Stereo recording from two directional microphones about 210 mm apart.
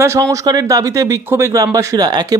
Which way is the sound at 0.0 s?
15° right (ahead or behind).